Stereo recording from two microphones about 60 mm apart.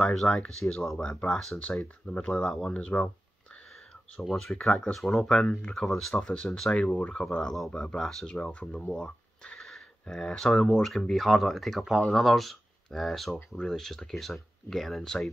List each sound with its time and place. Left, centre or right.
0.0 s speech: centre
4.2 s speech: centre
4.6 s speech: left
4.9 s speech: centre
8.0 s speech: centre
8.3 s speech: centre
8.9 s a sound: centre
10.1 s speech: centre